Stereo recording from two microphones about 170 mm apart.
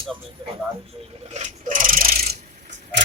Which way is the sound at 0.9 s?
35° right (ahead or behind).